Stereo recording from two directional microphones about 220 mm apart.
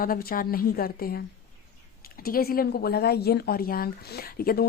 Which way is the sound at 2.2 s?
40° left (ahead or behind).